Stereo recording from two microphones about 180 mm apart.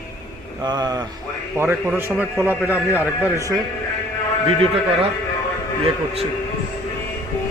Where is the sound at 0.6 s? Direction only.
20° right (ahead or behind).